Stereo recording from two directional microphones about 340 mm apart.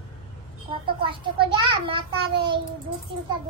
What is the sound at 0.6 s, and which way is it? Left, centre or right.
A child's voice, centre.